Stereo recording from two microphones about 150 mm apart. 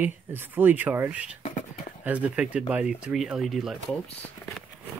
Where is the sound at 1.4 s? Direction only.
55° left (ahead or behind).